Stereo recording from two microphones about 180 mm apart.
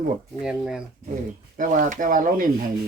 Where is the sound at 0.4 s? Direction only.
5° right (ahead or behind).